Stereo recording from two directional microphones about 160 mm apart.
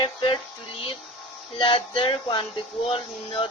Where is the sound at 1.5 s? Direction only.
30° left (ahead or behind).